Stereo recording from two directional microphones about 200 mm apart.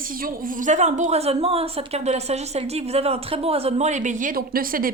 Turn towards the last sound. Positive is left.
turn(degrees=-45)  # may be behind; listen again after turning